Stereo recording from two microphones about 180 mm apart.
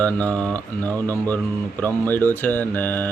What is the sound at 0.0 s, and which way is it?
Mantra, 10° left (ahead or behind).